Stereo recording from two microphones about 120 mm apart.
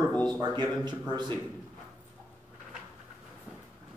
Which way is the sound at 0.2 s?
35° right (ahead or behind).